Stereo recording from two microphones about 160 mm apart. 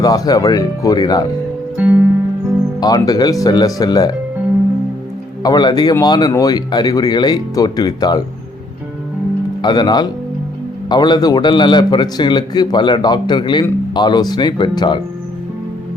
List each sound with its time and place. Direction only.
0.0 s a man's voice: 25° left (ahead or behind)
1.7 s music: 10° right (ahead or behind)
2.8 s a man's voice: 25° left (ahead or behind)
5.4 s a man's voice: 25° left (ahead or behind)
9.6 s a man's voice: 25° left (ahead or behind)